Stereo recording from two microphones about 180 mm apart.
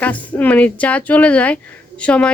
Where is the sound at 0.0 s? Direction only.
10° left (ahead or behind).